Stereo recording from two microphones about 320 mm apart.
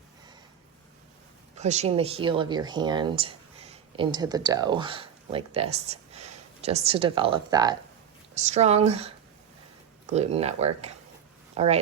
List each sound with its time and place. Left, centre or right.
1.5 s speech: right